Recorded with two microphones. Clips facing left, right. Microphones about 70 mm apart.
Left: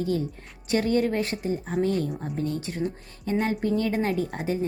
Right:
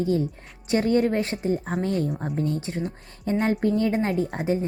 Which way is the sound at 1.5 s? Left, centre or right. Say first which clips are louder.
Left 1 dB; right.